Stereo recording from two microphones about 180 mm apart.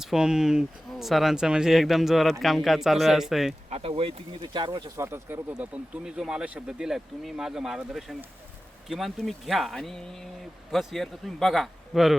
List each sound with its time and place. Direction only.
0.0 s speech: 5° right (ahead or behind)
3.7 s a sound: 30° right (ahead or behind)
4.5 s speech: 25° right (ahead or behind)
4.9 s speech: 15° right (ahead or behind)